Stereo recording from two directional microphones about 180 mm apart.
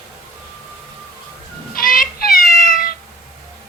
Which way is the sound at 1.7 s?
50° left (ahead or behind).